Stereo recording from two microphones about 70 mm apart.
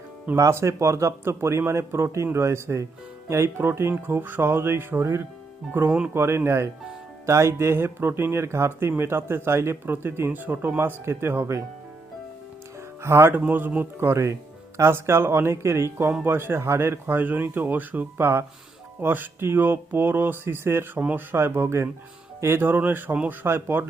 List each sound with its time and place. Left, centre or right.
0.3 s speech: right
13.0 s speech: right
13.5 s speech: right
14.1 s speech: right